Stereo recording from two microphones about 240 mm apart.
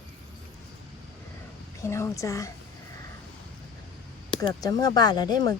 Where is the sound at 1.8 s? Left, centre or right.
Centre.